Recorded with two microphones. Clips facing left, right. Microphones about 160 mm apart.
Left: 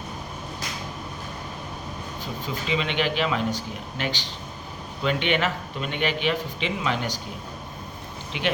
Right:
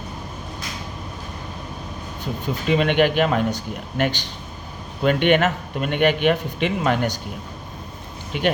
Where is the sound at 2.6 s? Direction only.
55° right (ahead or behind).